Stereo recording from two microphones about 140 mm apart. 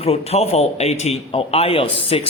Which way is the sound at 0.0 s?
45° left (ahead or behind).